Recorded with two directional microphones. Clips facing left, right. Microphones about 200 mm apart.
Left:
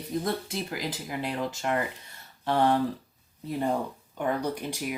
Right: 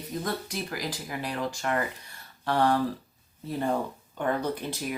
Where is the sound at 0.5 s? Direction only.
25° left (ahead or behind).